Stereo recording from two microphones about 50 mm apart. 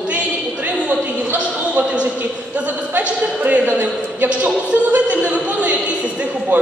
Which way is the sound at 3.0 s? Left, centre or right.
Right.